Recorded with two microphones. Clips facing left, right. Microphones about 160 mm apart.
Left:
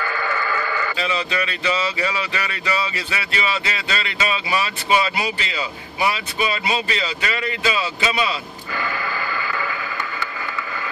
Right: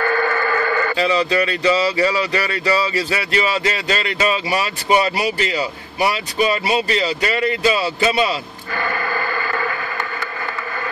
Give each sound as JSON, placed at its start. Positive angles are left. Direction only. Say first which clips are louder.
{"t": 0.0, "sound": "sheep", "louder": "right 6 dB", "side_deg": -55}
{"t": 0.9, "sound": "speech", "louder": "right 8 dB", "side_deg": -40}
{"t": 8.7, "sound": "radio", "louder": "right 4 dB", "side_deg": -55}